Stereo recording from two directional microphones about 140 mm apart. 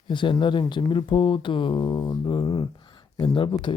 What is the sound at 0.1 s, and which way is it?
Speech, 35° left (ahead or behind).